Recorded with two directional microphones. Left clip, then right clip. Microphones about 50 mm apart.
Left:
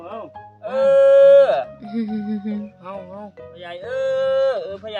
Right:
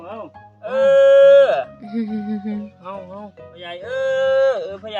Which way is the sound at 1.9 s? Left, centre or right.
Centre.